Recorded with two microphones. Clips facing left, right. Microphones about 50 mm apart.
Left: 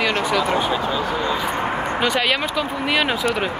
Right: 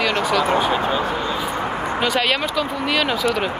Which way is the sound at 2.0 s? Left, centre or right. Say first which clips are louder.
Right 1 dB; centre.